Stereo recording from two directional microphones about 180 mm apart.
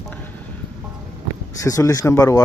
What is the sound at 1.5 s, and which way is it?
Speech, 20° left (ahead or behind).